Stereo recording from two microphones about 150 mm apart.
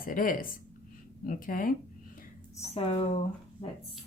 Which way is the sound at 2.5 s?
40° left (ahead or behind).